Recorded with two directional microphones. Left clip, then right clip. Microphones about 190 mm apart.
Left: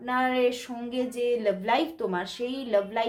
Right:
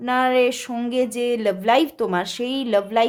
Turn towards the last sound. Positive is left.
turn(degrees=-45)  # may be behind; listen again after turning